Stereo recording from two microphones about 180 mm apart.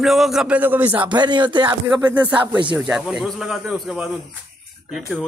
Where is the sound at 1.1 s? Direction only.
25° right (ahead or behind).